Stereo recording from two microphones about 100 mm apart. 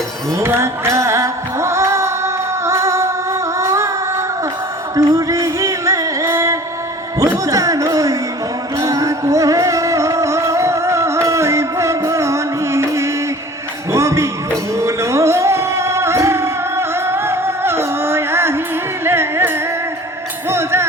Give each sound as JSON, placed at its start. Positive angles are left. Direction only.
{"t": 0.3, "sound": "music", "side_deg": -25}
{"t": 3.6, "sound": "singing", "side_deg": -30}
{"t": 4.9, "sound": "music", "side_deg": -35}